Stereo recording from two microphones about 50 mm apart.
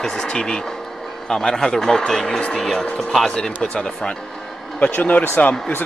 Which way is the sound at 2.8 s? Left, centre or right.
Centre.